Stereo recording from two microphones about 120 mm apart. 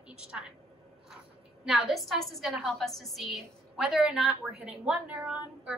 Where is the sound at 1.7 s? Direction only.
Centre (ahead or behind).